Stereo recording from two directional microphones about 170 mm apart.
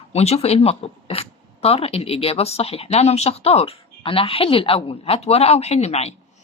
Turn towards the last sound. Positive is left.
turn(degrees=40)  # may be behind; listen again after turning